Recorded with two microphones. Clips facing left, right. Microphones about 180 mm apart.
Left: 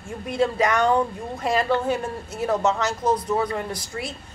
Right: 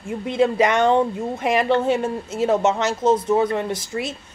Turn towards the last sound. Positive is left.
turn(degrees=-20)  # may be behind; listen again after turning